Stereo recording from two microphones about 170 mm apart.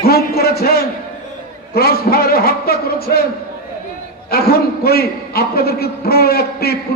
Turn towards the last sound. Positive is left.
turn(degrees=65)  # may be behind; listen again after turning